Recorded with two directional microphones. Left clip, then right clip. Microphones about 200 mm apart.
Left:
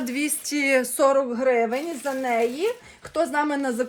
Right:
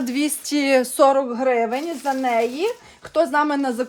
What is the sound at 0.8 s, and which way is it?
A woman's voice, 35° right (ahead or behind).